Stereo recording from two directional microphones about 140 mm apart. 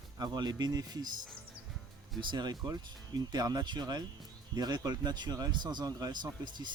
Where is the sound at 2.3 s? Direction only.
30° right (ahead or behind).